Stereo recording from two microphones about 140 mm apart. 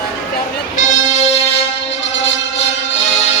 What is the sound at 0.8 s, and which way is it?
Music, 65° left (ahead or behind).